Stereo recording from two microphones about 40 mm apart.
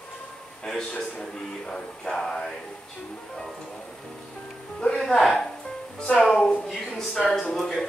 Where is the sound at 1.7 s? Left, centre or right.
Centre.